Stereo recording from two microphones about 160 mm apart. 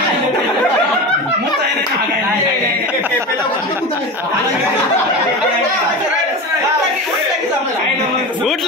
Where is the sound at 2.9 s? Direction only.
10° right (ahead or behind).